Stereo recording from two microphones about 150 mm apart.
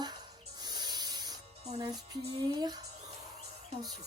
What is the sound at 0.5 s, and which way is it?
Snake, 30° right (ahead or behind).